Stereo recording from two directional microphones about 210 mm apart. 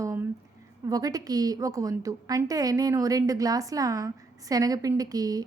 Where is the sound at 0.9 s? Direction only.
15° right (ahead or behind).